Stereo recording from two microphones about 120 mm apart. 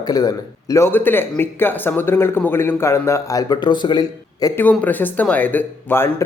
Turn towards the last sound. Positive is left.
turn(degrees=20)  # may be behind; listen again after turning